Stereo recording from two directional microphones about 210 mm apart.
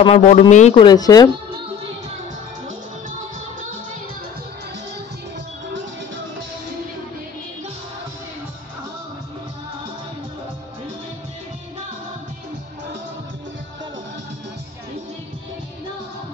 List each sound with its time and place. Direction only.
0.0 s speech: 30° left (ahead or behind)